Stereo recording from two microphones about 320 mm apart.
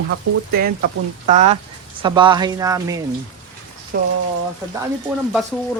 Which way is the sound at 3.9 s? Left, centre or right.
Right.